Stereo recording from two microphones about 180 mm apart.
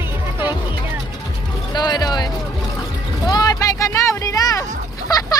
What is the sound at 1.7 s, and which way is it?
Speech, 25° left (ahead or behind).